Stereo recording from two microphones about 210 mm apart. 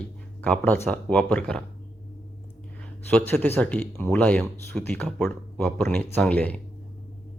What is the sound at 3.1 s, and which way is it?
Speech, 10° left (ahead or behind).